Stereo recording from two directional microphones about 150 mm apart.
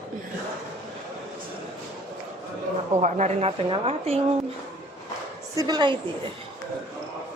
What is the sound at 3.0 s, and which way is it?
A woman's voice, 45° right (ahead or behind).